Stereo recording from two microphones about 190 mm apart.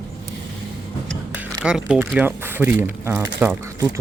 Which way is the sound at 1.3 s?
5° right (ahead or behind).